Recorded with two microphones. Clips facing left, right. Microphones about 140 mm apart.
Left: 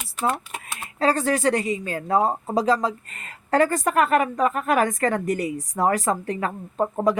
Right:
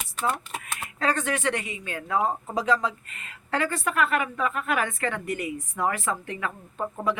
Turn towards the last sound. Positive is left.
turn(degrees=40)  # may be behind; listen again after turning